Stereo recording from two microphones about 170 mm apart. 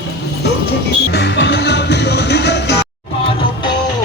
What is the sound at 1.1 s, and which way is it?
Music, 90° left.